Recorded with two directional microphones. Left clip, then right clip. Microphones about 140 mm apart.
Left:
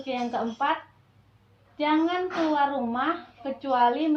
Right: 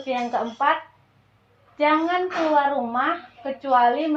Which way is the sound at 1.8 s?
25° right (ahead or behind).